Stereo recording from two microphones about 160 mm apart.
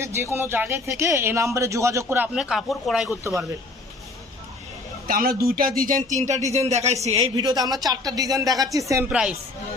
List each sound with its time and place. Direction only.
0.0 s speech: 15° right (ahead or behind)
5.0 s speech: 65° right (ahead or behind); by 7.3 s 40° right (ahead or behind)
7.3 s speech: 25° right (ahead or behind)
9.0 s speech: 5° right (ahead or behind)